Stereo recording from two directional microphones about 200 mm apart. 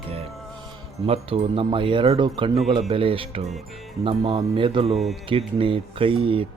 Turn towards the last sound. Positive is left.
turn(degrees=-30)  # may be behind; listen again after turning